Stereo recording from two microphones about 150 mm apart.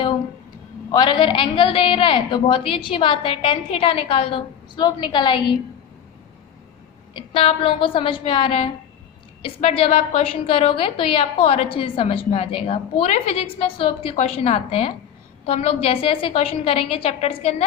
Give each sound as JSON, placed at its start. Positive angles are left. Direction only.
{"t": 0.9, "sound": "a woman's voice", "side_deg": 30}
{"t": 7.3, "sound": "a woman's voice", "side_deg": 35}